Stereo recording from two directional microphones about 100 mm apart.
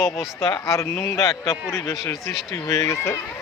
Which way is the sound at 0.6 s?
30° left (ahead or behind).